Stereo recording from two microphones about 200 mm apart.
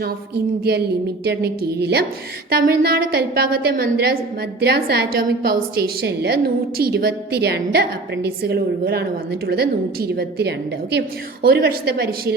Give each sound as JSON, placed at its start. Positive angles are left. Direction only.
{"t": 0.0, "sound": "a woman's voice", "side_deg": -50}